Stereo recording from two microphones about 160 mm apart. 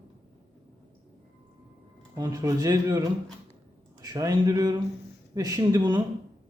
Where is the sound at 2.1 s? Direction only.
25° right (ahead or behind).